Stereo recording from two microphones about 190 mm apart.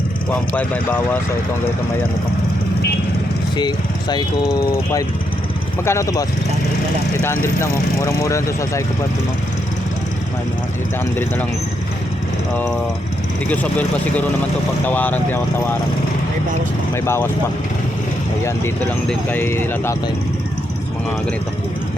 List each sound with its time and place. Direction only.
0.3 s speech: 10° left (ahead or behind)
3.6 s speech: 20° left (ahead or behind)
13.5 s speech: 10° left (ahead or behind)
16.9 s speech: 15° left (ahead or behind)
18.4 s speech: 10° left (ahead or behind)